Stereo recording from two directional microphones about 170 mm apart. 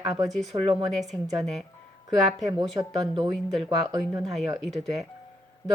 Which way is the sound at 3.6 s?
20° right (ahead or behind).